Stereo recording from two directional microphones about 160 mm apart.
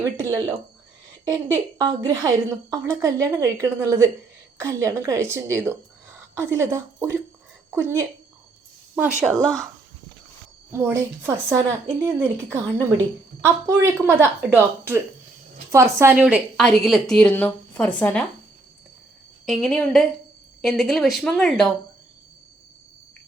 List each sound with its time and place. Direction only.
0.2 s a woman's voice: 15° right (ahead or behind)
9.4 s speech: 5° left (ahead or behind)
10.7 s speech: 15° right (ahead or behind)
16.2 s a woman's voice: centre (ahead or behind)
19.5 s a woman's voice: centre (ahead or behind)